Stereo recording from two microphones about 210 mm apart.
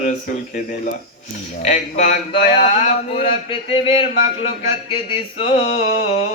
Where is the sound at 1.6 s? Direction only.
35° left (ahead or behind).